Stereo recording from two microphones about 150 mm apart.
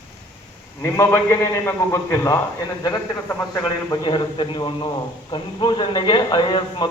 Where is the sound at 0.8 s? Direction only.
15° left (ahead or behind).